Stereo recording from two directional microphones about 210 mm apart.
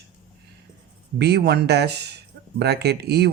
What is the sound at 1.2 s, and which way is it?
Speech, 50° right (ahead or behind).